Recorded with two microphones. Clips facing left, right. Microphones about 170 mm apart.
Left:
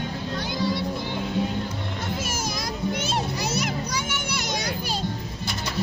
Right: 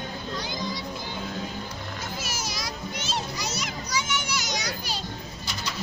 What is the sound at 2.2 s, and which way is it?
Children playing, 50° left (ahead or behind).